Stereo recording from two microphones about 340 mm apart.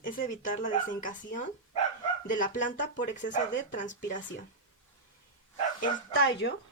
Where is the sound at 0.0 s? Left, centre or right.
Left.